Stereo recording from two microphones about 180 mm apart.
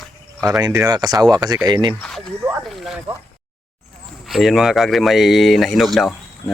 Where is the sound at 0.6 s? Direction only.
20° right (ahead or behind).